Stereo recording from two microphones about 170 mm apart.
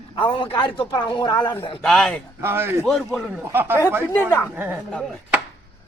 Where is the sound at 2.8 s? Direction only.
Centre (ahead or behind).